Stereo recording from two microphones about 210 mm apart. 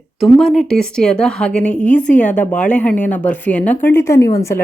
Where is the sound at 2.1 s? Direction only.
35° left (ahead or behind).